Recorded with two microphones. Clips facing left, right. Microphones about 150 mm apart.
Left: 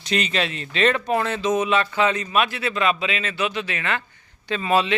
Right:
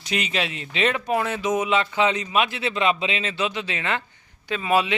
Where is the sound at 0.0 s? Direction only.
10° right (ahead or behind).